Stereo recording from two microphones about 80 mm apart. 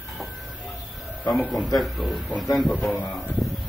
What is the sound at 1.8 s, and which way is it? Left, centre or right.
Speech, centre.